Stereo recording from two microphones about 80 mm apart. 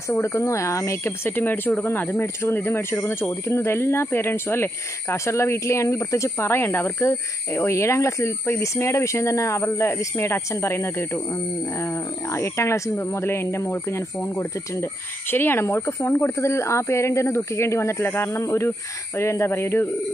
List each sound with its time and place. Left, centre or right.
0.1 s a woman's voice: left